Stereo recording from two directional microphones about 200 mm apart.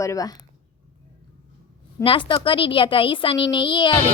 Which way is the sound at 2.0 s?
25° left (ahead or behind).